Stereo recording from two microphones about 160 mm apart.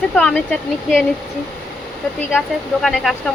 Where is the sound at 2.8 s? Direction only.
Centre (ahead or behind).